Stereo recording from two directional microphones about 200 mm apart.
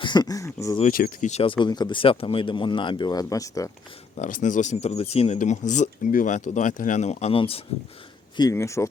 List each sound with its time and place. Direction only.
0.0 s speech: 20° left (ahead or behind)
0.8 s speech: 45° left (ahead or behind); by 3.7 s 15° left (ahead or behind)
4.2 s speech: 40° left (ahead or behind)
8.4 s speech: 15° left (ahead or behind)